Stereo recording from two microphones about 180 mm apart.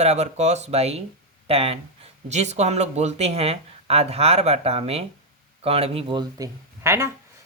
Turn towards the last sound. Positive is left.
turn(degrees=-15)  # may be behind; listen again after turning